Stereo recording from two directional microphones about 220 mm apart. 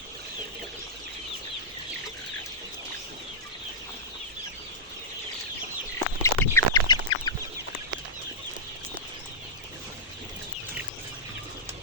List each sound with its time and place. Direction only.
6.2 s chicken: 10° left (ahead or behind)